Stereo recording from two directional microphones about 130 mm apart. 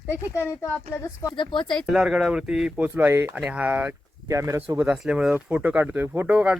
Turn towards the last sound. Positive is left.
turn(degrees=-10)  # may be behind; listen again after turning